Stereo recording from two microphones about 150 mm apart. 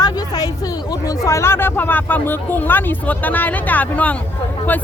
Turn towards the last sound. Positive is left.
turn(degrees=10)  # may be behind; listen again after turning